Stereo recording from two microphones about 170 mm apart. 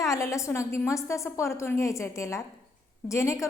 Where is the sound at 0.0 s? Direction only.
20° left (ahead or behind).